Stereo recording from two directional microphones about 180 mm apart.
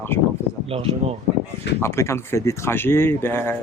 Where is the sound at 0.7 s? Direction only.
30° right (ahead or behind).